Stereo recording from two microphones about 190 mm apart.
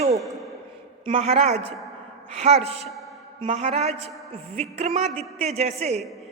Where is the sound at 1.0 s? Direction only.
30° right (ahead or behind).